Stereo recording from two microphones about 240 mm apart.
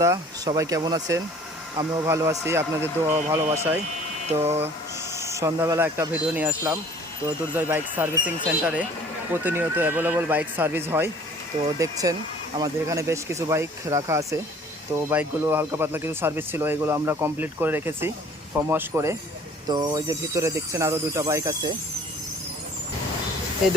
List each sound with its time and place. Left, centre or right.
0.0 s speech: centre